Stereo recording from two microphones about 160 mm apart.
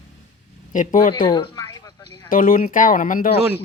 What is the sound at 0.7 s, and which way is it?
Speech, 55° left (ahead or behind).